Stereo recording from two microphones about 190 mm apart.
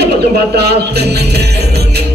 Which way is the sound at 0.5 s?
60° right (ahead or behind).